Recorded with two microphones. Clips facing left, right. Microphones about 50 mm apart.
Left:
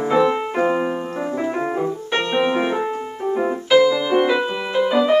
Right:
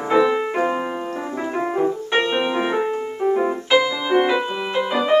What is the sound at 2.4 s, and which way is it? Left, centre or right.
Music, centre.